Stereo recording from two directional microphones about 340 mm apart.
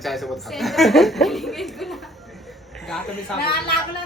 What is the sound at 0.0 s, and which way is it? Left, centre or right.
Speech, centre.